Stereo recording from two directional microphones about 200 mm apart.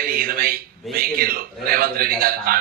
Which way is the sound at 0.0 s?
45° right (ahead or behind).